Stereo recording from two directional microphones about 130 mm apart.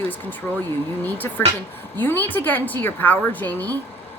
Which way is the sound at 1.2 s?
20° left (ahead or behind).